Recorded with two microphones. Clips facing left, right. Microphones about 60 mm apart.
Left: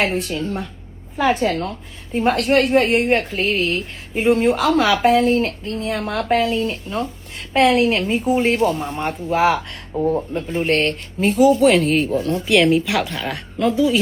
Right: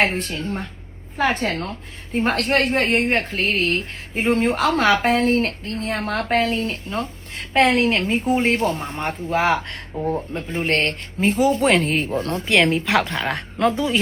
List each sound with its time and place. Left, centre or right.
0.0 s a woman's voice: right